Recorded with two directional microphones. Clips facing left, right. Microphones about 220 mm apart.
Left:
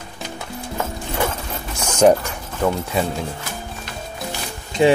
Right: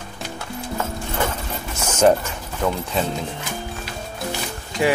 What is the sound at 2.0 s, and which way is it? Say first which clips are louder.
Speech: left 2 dB; 10° left (ahead or behind).